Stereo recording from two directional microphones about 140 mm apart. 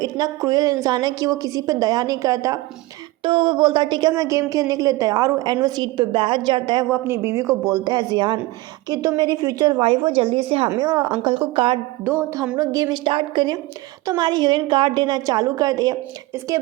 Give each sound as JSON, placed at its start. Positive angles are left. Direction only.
{"t": 0.0, "sound": "a woman's voice", "side_deg": -25}
{"t": 3.2, "sound": "speech", "side_deg": -35}
{"t": 6.9, "sound": "a woman's voice", "side_deg": -20}
{"t": 7.9, "sound": "a woman's voice", "side_deg": -35}
{"t": 9.8, "sound": "speech", "side_deg": -40}
{"t": 12.0, "sound": "a sound", "side_deg": -15}
{"t": 12.5, "sound": "a woman's voice", "side_deg": -25}